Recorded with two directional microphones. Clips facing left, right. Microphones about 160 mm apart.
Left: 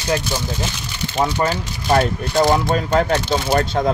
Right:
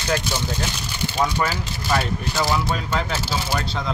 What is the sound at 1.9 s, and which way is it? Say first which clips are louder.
Speech: left 6 dB; 50° left (ahead or behind).